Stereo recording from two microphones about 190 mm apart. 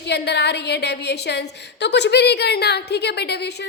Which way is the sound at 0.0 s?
60° left (ahead or behind).